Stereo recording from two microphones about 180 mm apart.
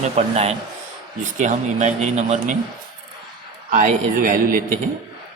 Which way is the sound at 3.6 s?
50° right (ahead or behind).